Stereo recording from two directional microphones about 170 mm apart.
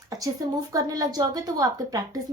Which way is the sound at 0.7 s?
20° right (ahead or behind).